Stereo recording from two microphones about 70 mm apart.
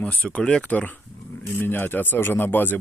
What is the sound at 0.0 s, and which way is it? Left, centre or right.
Speech, centre.